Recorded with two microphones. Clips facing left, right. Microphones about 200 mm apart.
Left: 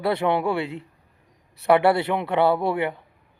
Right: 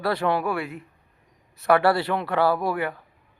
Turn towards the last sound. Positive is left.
turn(degrees=25)  # may be behind; listen again after turning